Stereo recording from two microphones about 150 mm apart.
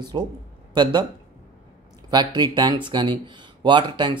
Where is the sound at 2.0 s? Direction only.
30° right (ahead or behind).